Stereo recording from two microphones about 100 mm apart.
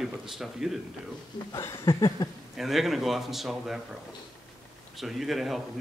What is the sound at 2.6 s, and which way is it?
Speech, centre (ahead or behind).